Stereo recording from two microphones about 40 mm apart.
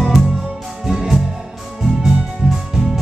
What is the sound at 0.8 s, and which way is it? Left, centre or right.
Music, centre.